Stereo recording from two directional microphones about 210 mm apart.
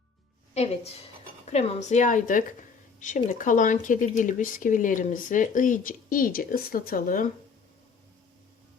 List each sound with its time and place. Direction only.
0.5 s a woman's voice: 30° left (ahead or behind)